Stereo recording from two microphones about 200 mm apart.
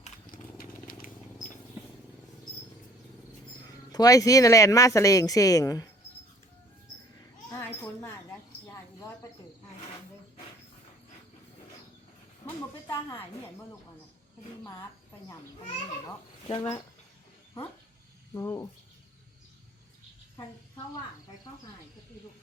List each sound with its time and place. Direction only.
0.6 s vehicle: 45° left (ahead or behind)
3.9 s speech: 15° left (ahead or behind)
7.5 s speech: 10° left (ahead or behind)
12.9 s speech: 10° left (ahead or behind)
14.6 s speech: 15° left (ahead or behind)
16.5 s speech: 25° left (ahead or behind)
18.3 s speech: 15° left (ahead or behind)